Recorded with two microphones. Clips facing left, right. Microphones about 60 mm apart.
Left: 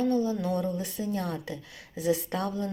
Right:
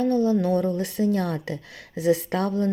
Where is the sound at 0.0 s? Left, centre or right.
Right.